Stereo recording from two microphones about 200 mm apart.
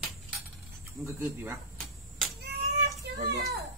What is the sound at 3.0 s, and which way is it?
Speech, 55° right (ahead or behind).